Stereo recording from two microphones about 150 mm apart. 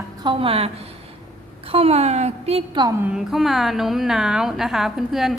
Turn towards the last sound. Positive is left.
turn(degrees=0)  # may be behind; listen again after turning